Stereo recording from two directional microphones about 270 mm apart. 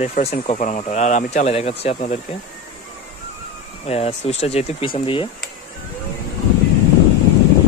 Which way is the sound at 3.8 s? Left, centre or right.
Left.